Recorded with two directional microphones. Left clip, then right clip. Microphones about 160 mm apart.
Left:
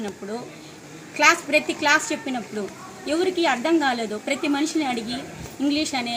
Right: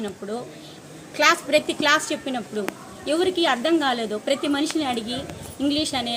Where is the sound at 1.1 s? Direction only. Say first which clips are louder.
Even; 15° right (ahead or behind).